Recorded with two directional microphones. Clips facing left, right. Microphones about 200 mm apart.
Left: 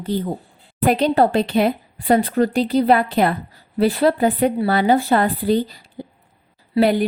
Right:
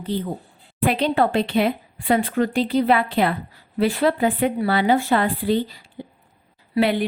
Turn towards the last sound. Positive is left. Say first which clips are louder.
# left 3 dB
turn(degrees=40)  # may be behind; listen again after turning